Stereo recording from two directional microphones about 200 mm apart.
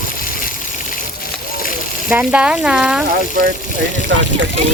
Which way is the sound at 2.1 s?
5° right (ahead or behind).